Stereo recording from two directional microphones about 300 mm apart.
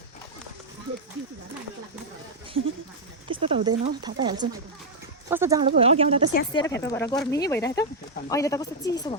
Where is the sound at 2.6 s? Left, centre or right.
Right.